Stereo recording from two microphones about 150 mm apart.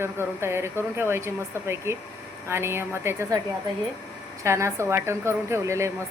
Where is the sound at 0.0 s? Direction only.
15° right (ahead or behind).